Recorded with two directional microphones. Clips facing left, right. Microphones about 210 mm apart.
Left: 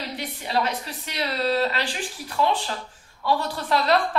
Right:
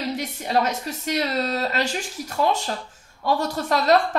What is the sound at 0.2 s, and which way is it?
A woman's voice, 45° right (ahead or behind).